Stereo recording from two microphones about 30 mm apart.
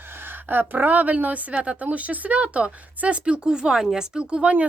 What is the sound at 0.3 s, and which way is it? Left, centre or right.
A woman's voice, right.